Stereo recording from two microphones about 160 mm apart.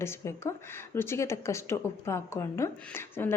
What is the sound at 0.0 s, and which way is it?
A woman's voice, 15° left (ahead or behind).